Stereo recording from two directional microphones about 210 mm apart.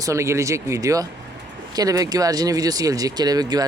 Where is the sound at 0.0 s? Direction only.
15° right (ahead or behind).